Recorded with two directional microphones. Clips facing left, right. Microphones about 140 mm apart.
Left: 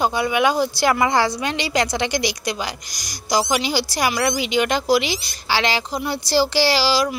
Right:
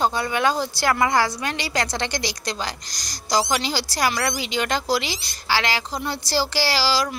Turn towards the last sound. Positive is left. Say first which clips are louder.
# left 4 dB
turn(degrees=15)  # may be behind; listen again after turning